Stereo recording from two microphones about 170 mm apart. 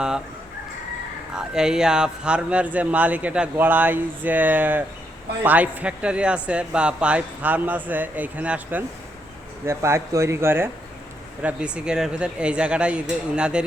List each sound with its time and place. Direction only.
1.3 s speech: 5° right (ahead or behind)